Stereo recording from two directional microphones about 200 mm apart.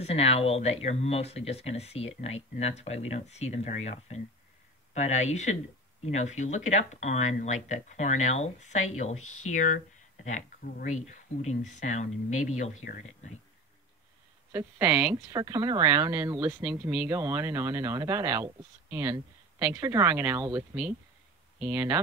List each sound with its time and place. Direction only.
0.0 s speech: 30° left (ahead or behind)
14.5 s speech: 10° right (ahead or behind)